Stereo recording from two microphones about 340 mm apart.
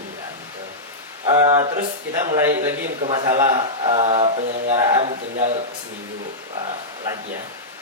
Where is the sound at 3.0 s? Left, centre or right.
Centre.